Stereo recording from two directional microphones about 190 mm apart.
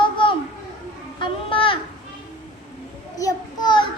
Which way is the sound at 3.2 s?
20° left (ahead or behind).